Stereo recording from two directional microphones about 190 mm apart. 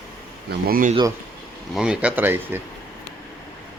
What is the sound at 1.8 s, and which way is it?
Speech, 5° right (ahead or behind).